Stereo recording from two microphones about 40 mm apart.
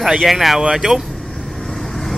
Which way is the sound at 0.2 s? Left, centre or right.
Centre.